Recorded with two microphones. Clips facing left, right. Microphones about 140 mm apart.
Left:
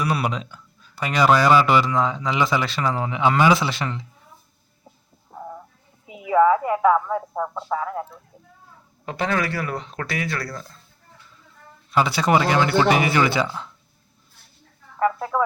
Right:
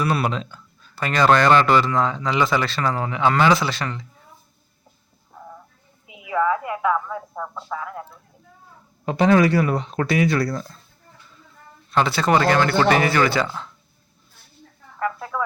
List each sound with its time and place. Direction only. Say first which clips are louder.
0.0 s speech: right 2 dB; 10° left (ahead or behind)
6.1 s a sound: left 5 dB; 35° left (ahead or behind)
7.3 s speech: left 5 dB; 20° left (ahead or behind)
9.0 s speech: right 8 dB; 20° right (ahead or behind)
11.9 s speech: even; 10° left (ahead or behind)
14.9 s a sound: left 5 dB; 20° left (ahead or behind)